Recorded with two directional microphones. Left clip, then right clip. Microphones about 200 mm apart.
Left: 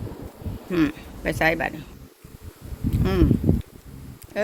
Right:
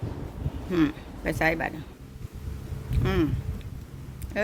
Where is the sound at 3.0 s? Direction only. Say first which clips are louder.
Left 3 dB; 10° left (ahead or behind).